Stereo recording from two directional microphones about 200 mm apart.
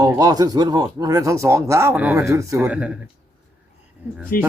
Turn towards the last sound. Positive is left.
turn(degrees=45)  # may be behind; listen again after turning